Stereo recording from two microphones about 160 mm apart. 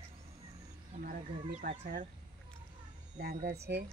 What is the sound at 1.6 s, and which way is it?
Speech, 55° right (ahead or behind).